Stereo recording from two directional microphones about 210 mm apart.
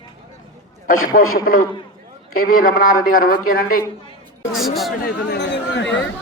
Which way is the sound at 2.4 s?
40° left (ahead or behind).